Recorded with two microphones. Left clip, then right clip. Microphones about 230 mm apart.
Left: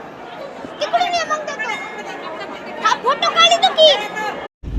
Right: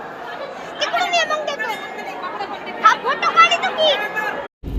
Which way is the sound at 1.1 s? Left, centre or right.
Centre.